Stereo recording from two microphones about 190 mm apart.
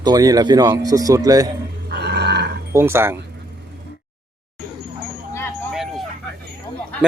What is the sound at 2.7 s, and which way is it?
Speech, 10° right (ahead or behind).